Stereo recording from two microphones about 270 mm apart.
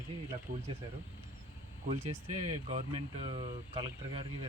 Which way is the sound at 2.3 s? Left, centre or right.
Right.